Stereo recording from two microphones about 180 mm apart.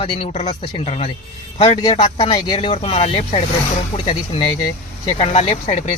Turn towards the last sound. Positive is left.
turn(degrees=35)  # may be behind; listen again after turning